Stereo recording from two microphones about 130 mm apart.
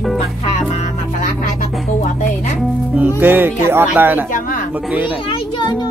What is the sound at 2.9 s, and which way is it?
Speech, 15° right (ahead or behind).